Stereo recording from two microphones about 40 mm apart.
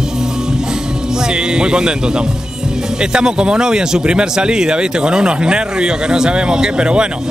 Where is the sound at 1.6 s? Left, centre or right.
Right.